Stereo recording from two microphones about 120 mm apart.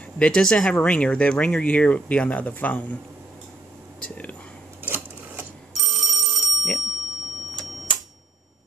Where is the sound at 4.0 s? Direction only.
10° left (ahead or behind).